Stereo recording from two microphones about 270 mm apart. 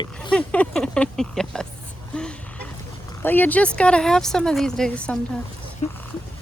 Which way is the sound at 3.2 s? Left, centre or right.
Centre.